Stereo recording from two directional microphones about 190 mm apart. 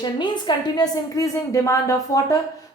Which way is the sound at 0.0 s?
20° left (ahead or behind).